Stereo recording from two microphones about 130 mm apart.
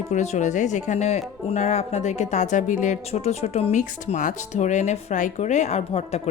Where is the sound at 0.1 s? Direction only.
60° left (ahead or behind).